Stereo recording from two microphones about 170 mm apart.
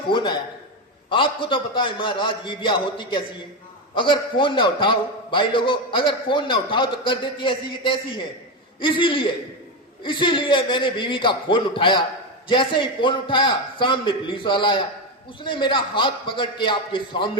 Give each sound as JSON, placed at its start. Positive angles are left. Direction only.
{"t": 0.1, "sound": "a man's voice", "side_deg": 30}